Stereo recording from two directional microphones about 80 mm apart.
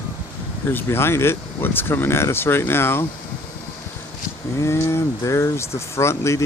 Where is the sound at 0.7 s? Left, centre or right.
Left.